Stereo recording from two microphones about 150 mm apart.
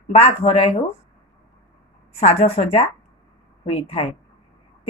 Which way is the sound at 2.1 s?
45° left (ahead or behind).